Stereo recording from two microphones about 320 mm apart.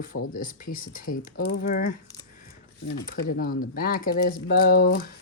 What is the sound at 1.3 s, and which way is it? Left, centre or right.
Speech, left.